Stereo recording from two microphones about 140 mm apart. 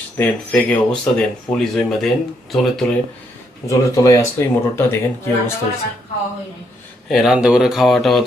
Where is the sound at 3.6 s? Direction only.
25° left (ahead or behind).